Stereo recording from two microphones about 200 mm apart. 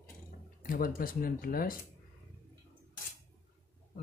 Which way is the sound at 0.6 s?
45° left (ahead or behind).